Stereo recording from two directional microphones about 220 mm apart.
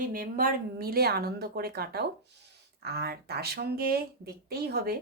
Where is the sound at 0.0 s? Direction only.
40° right (ahead or behind).